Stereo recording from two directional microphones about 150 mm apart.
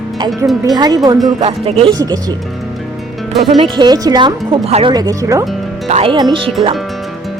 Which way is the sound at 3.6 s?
30° right (ahead or behind).